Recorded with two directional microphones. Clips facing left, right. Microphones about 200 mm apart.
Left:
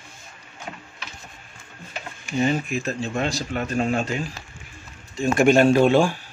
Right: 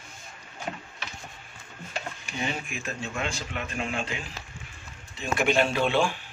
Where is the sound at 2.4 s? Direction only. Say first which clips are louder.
Left 10 dB; 40° left (ahead or behind).